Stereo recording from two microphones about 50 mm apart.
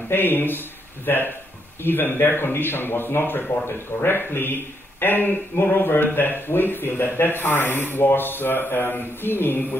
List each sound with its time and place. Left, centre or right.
0.1 s speech: left